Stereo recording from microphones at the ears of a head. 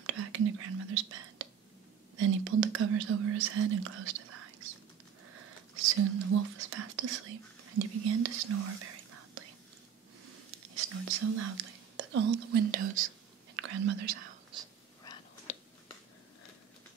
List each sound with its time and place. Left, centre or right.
0.0 s whispering: right
5.3 s speech: right